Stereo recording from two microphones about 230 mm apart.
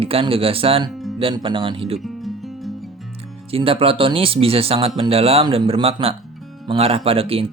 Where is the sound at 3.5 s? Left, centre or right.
Right.